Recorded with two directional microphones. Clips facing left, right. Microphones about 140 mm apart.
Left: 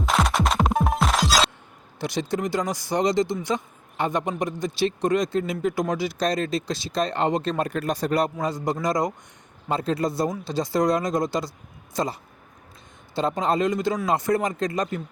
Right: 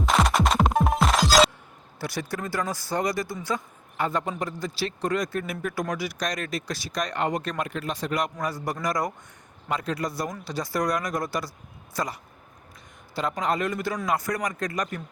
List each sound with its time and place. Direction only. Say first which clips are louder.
0.0 s music: even; centre (ahead or behind)
2.0 s a man's voice: left 5 dB; 20° left (ahead or behind)
7.7 s a man's voice: left 5 dB; 45° left (ahead or behind); by 12.1 s 25° left (ahead or behind)
13.1 s a man's voice: left 4 dB; 25° left (ahead or behind)